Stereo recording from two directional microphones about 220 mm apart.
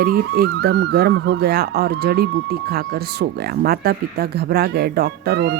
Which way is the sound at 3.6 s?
45° right (ahead or behind).